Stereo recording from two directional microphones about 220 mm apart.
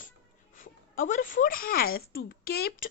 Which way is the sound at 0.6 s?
35° left (ahead or behind).